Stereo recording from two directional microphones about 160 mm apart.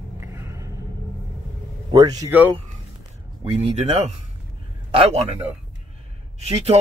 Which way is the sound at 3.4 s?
40° right (ahead or behind).